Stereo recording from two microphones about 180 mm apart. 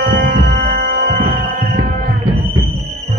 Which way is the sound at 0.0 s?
55° right (ahead or behind).